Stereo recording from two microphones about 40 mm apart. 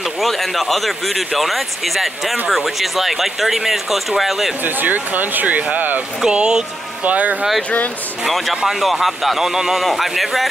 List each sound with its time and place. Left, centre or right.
0.2 s speech: centre
4.6 s speech: right
6.2 s speech: centre
7.1 s speech: right
8.5 s speech: centre